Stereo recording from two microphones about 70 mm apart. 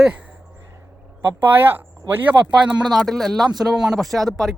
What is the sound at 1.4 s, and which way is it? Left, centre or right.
Speech, right.